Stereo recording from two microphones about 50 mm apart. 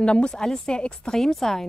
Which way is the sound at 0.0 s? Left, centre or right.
Centre.